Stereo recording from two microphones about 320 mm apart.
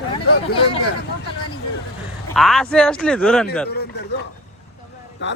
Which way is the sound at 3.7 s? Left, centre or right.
Left.